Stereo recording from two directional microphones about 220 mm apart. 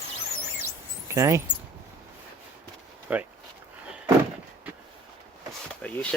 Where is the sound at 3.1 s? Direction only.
5° right (ahead or behind).